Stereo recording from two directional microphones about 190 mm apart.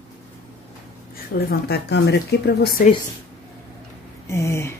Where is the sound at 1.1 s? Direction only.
55° left (ahead or behind).